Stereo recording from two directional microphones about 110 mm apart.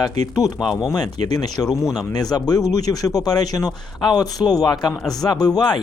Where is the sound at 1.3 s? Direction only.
35° left (ahead or behind).